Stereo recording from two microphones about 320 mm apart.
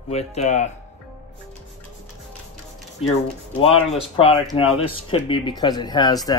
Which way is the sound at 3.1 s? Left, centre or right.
Centre.